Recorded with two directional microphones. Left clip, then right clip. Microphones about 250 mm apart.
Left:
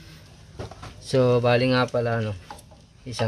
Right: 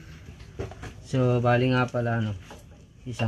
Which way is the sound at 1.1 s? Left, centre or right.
Left.